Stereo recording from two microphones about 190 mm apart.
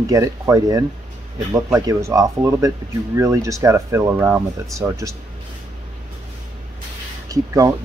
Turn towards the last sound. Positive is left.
turn(degrees=-15)  # may be behind; listen again after turning